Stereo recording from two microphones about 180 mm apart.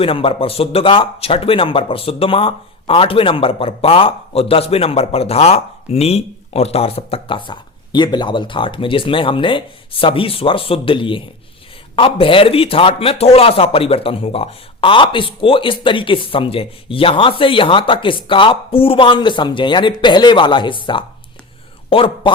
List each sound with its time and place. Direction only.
0.0 s speech: 30° left (ahead or behind)